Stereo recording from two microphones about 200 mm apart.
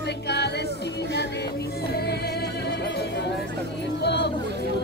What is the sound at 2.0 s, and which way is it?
Music, 55° left (ahead or behind).